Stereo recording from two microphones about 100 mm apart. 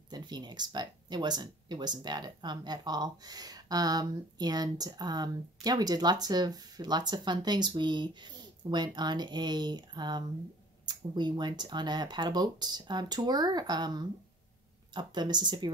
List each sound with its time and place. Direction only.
0.1 s speech: 45° right (ahead or behind)